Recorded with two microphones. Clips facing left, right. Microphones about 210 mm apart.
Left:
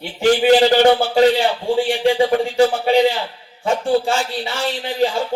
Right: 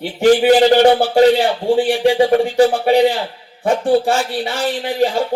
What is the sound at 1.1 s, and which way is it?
Speech, 55° right (ahead or behind).